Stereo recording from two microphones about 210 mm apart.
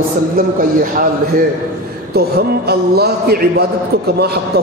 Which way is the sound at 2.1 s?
50° right (ahead or behind).